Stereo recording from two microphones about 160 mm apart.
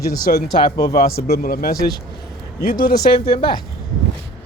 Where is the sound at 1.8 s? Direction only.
25° left (ahead or behind).